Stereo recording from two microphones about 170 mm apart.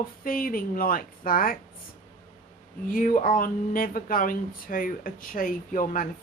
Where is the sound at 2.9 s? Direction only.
50° left (ahead or behind).